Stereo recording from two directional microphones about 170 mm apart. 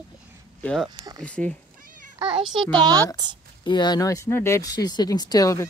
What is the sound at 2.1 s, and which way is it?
Speech, 30° right (ahead or behind).